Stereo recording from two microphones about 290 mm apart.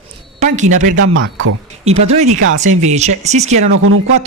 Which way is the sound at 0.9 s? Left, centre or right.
Right.